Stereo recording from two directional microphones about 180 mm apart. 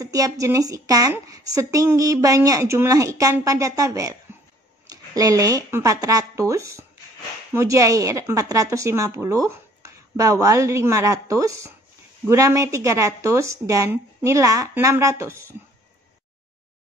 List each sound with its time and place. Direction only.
0.0 s a woman's voice: 20° right (ahead or behind)